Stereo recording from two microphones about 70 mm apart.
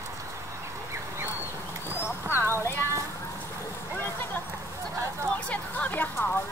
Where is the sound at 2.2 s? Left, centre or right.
Right.